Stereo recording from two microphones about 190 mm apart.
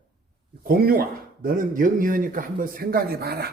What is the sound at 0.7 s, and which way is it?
Speech, 50° right (ahead or behind).